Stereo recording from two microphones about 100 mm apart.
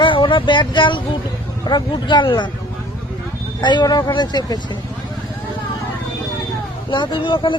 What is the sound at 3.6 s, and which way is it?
A woman's voice, 50° left (ahead or behind).